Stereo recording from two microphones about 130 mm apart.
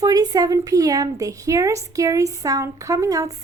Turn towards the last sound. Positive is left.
turn(degrees=-25)  # may be behind; listen again after turning